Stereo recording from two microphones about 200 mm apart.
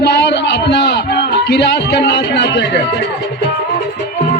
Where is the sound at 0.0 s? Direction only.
55° left (ahead or behind).